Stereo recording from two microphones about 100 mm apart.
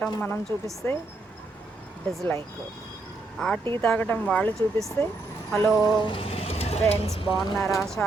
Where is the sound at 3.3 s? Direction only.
5° left (ahead or behind).